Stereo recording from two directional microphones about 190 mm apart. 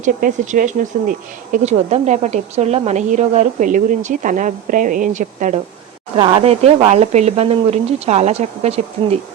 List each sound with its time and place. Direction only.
0.0 s a woman's voice: 40° right (ahead or behind)
6.1 s a woman's voice: 25° right (ahead or behind)